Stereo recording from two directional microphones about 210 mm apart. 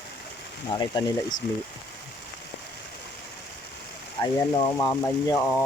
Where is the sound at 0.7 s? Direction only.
20° left (ahead or behind).